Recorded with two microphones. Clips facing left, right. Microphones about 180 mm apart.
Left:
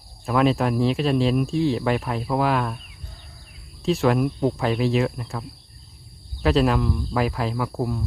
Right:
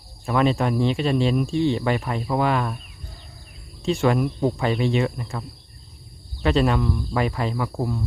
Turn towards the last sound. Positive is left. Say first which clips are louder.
# even
turn(degrees=5)  # may be behind; listen again after turning